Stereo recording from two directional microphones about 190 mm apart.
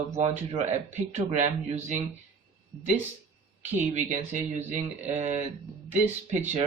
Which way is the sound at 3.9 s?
40° right (ahead or behind).